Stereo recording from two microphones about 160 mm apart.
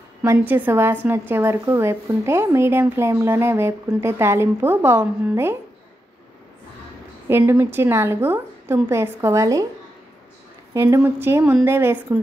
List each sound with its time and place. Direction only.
0.2 s a woman's voice: 15° right (ahead or behind)
7.2 s a woman's voice: 15° right (ahead or behind)
10.7 s a woman's voice: 15° right (ahead or behind)